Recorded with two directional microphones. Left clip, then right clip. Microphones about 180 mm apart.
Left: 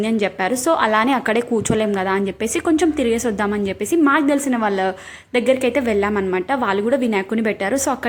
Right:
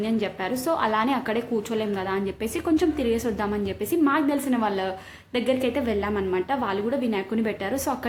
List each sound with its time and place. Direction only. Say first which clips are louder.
0.7 s a woman's voice: left 7 dB; 30° left (ahead or behind)